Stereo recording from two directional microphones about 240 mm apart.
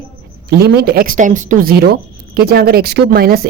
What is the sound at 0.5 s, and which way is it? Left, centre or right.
Speech, right.